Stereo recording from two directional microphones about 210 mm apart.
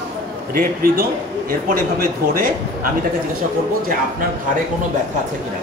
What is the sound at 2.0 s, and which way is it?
Speech, 45° right (ahead or behind).